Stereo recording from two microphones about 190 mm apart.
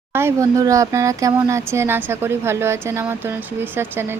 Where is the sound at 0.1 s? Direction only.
15° right (ahead or behind).